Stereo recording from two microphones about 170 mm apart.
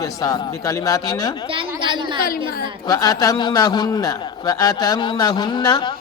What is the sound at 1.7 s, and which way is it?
Speech, 30° right (ahead or behind).